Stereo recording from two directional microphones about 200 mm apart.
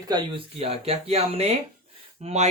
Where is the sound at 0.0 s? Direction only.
25° right (ahead or behind).